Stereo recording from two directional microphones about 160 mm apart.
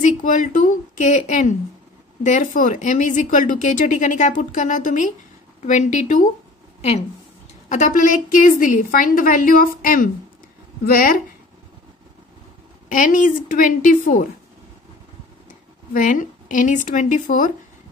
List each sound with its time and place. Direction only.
0.0 s a woman's voice: 50° left (ahead or behind)
7.7 s a woman's voice: 50° left (ahead or behind)
10.9 s speech: 65° left (ahead or behind)
12.8 s a woman's voice: 55° left (ahead or behind)
15.9 s speech: 55° left (ahead or behind)